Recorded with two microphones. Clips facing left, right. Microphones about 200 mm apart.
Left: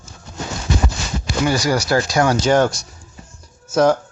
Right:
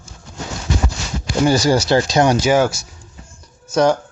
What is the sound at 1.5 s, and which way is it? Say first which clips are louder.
Speech: right 3 dB; 25° right (ahead or behind).